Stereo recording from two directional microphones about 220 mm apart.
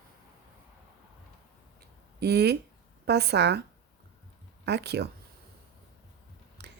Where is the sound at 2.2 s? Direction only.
50° right (ahead or behind).